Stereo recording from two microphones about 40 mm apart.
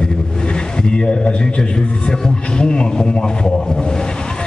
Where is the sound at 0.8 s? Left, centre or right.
Left.